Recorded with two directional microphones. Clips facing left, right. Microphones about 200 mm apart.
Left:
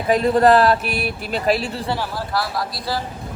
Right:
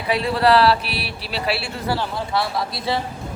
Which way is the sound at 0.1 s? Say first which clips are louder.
Left 3 dB; 45° left (ahead or behind).